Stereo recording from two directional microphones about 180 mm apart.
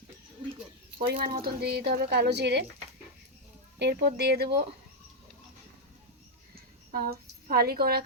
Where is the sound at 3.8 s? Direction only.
65° right (ahead or behind).